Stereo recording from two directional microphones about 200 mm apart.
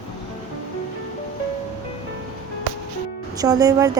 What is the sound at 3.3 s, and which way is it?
Speech, 20° right (ahead or behind).